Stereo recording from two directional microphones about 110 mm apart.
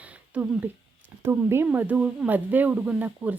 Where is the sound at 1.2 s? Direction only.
20° right (ahead or behind).